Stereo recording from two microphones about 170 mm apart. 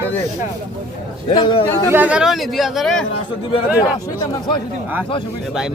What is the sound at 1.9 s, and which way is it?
Speech, 10° right (ahead or behind).